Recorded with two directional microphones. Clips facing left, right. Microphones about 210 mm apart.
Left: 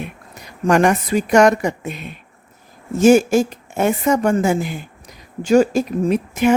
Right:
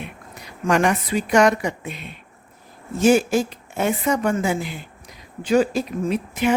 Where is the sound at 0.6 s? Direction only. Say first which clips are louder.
Left 4 dB; 45° left (ahead or behind).